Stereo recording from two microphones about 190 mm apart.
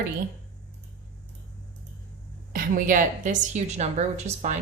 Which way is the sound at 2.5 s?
45° right (ahead or behind).